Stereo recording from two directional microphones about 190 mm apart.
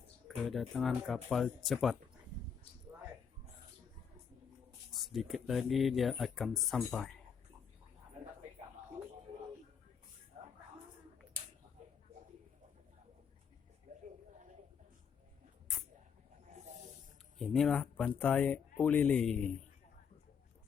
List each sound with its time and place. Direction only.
0.3 s speech: centre (ahead or behind)
4.9 s speech: centre (ahead or behind)
16.5 s snake: 40° right (ahead or behind)
17.3 s speech: centre (ahead or behind)